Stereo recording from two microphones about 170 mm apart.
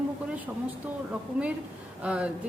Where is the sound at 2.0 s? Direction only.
5° right (ahead or behind).